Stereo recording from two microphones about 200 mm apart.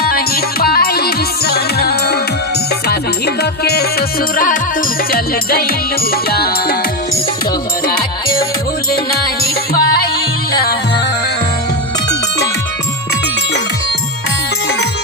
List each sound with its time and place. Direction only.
0.0 s music: 50° left (ahead or behind)
9.4 s music: 50° left (ahead or behind)